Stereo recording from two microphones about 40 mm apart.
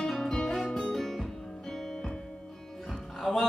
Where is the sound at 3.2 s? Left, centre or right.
Centre.